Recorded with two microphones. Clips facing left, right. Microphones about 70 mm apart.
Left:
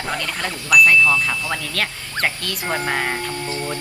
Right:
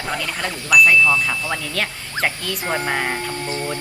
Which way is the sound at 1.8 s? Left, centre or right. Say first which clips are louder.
Left 1 dB; centre.